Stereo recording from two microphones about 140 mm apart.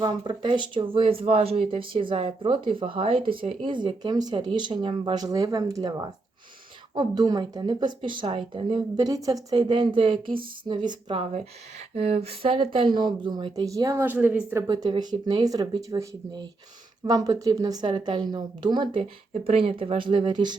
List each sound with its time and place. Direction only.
0.0 s speech: 35° right (ahead or behind); by 14.6 s 15° right (ahead or behind)
14.7 s speech: 30° right (ahead or behind)